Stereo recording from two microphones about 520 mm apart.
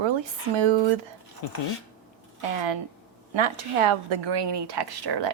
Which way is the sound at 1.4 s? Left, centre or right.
Left.